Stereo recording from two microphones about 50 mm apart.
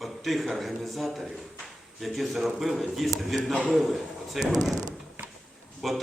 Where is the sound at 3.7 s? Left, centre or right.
Centre.